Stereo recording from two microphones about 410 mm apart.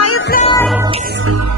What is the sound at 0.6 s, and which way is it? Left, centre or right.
Music, centre.